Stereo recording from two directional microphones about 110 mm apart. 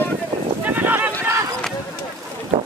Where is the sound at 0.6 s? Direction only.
15° right (ahead or behind).